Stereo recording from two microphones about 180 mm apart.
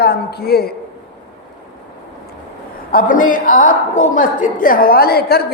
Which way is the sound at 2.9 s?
50° left (ahead or behind).